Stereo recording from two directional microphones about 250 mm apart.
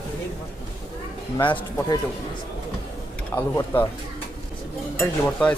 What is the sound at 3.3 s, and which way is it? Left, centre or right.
Speech, centre.